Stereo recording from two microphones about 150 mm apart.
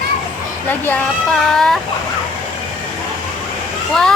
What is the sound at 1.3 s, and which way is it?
Speech, 5° left (ahead or behind).